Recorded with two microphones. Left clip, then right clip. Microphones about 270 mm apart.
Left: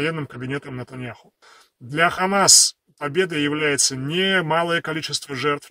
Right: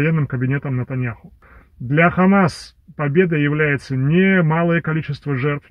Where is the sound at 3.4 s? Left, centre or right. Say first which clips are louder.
Right 1 dB; left.